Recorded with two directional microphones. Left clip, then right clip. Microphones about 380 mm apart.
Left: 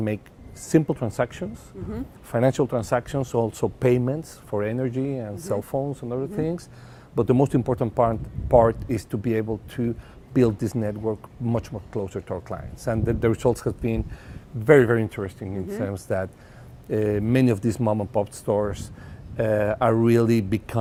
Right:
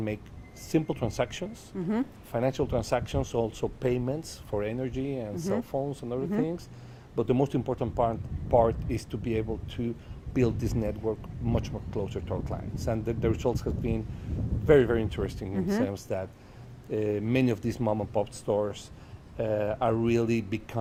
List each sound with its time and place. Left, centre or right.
0.7 s speech: left
1.7 s a woman's voice: right
2.3 s speech: left